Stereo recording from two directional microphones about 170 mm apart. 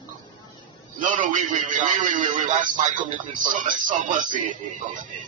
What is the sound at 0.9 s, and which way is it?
Speech, 50° right (ahead or behind).